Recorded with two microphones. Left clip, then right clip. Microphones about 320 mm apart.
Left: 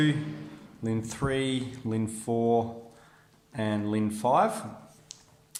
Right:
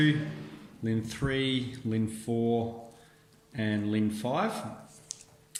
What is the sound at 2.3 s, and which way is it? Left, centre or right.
Speech, left.